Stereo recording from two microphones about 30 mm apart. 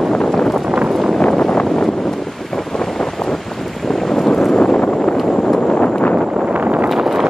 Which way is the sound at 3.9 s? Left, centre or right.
Centre.